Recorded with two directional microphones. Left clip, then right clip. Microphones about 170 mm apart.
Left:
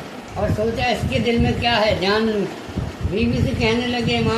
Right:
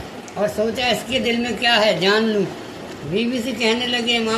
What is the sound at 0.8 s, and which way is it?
A man's voice, 50° right (ahead or behind).